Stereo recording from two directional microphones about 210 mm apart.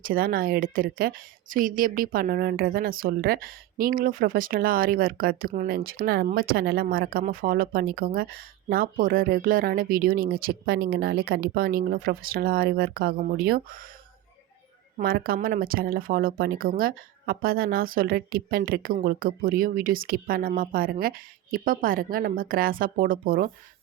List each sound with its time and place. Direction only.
0.0 s a woman's voice: 45° right (ahead or behind)
14.9 s a woman's voice: 45° right (ahead or behind)